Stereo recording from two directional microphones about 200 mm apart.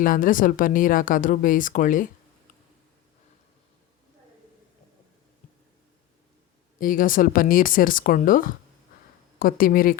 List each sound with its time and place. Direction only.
0.0 s speech: 45° left (ahead or behind)
6.7 s speech: 45° left (ahead or behind)